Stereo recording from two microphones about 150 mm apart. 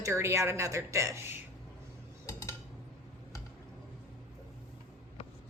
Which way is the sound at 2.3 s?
20° left (ahead or behind).